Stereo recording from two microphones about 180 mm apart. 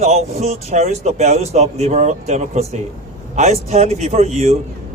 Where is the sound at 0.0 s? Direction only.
35° right (ahead or behind).